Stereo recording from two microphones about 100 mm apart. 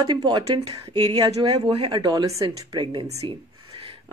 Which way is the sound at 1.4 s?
75° right (ahead or behind).